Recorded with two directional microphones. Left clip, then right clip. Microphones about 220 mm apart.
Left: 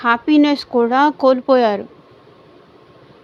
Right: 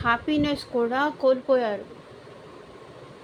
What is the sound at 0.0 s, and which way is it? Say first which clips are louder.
Speech: left 10 dB; 40° left (ahead or behind).